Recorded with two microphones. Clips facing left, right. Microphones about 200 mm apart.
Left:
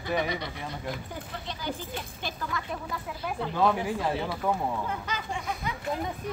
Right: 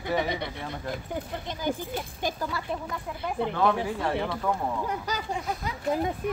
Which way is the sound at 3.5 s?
15° left (ahead or behind).